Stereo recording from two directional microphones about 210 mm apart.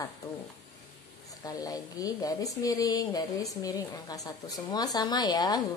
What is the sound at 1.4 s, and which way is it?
A woman's voice, 15° left (ahead or behind).